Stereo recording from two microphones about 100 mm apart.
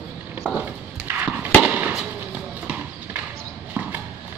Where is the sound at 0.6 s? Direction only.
15° right (ahead or behind).